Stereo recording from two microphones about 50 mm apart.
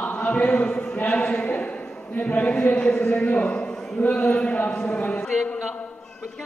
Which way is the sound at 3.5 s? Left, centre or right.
Centre.